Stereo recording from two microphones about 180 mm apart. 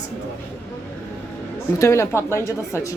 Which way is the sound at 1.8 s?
15° left (ahead or behind).